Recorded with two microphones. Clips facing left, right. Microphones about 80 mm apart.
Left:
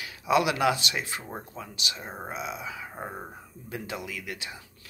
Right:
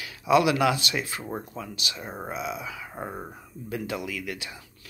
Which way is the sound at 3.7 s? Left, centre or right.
Left.